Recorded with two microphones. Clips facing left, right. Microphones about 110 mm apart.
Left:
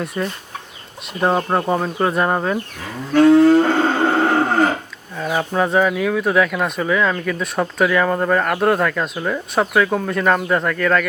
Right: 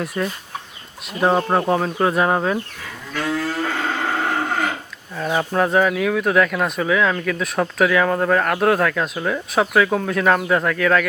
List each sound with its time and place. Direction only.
0.0 s speech: centre (ahead or behind)
3.2 s livestock: 30° left (ahead or behind)
5.1 s speech: centre (ahead or behind)